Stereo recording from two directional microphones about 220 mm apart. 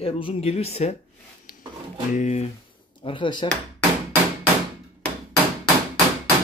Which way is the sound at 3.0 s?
20° left (ahead or behind).